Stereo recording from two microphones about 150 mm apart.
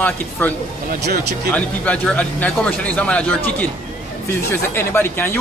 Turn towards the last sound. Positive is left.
turn(degrees=15)  # may be behind; listen again after turning